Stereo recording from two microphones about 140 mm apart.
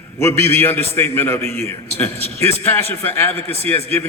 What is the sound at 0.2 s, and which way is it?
A man's voice, 20° left (ahead or behind).